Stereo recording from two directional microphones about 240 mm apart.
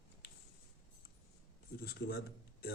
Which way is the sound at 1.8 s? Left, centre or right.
Left.